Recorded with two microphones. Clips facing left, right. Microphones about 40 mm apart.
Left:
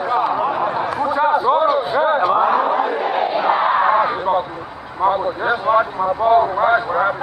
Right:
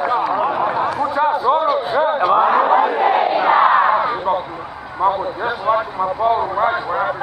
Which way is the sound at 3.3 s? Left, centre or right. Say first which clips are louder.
Right 2 dB; centre.